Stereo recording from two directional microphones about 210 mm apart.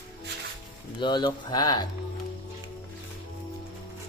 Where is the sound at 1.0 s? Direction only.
20° left (ahead or behind).